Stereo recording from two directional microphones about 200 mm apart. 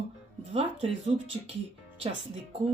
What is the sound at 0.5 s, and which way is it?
Speech, 30° right (ahead or behind).